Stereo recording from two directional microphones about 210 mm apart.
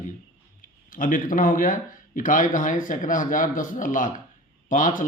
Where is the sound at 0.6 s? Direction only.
40° left (ahead or behind).